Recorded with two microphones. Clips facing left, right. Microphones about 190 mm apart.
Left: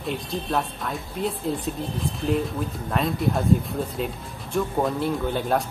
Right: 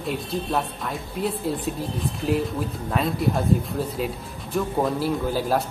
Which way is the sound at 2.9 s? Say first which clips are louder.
Even; centre (ahead or behind).